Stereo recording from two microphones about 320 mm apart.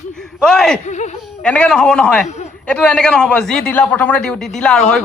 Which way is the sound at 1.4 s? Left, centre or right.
Centre.